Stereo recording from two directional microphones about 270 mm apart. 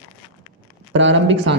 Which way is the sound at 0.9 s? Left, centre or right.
Right.